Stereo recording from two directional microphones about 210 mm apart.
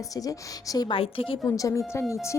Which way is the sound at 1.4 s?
15° left (ahead or behind).